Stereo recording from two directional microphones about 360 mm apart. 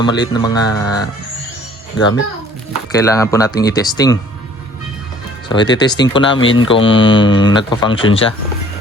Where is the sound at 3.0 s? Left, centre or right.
Centre.